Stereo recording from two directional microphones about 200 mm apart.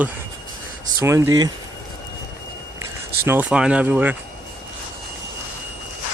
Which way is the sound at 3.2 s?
10° right (ahead or behind).